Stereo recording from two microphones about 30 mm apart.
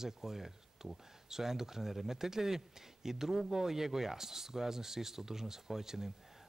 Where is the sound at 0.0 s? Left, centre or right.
Centre.